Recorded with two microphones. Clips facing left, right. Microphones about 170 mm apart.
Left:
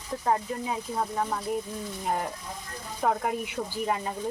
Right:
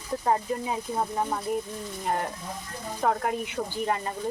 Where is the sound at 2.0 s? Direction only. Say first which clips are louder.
Right 1 dB; centre (ahead or behind).